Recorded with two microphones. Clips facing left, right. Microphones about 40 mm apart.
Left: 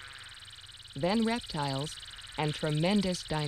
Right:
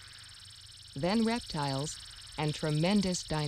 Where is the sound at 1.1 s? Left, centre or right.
Left.